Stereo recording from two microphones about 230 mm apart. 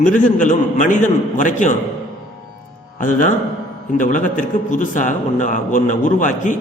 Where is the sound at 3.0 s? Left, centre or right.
Left.